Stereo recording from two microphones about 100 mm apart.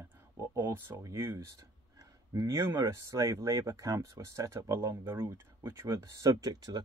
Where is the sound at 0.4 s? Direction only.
25° right (ahead or behind).